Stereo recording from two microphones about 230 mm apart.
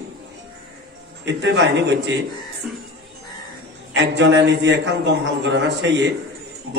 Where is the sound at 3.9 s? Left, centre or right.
Right.